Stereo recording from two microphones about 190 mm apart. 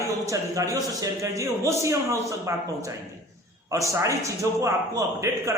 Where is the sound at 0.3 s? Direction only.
20° right (ahead or behind).